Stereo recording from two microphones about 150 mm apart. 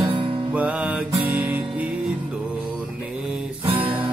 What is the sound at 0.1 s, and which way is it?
Music, 35° right (ahead or behind).